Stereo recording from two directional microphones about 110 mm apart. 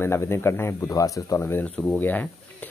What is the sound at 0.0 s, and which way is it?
Speech, 25° left (ahead or behind).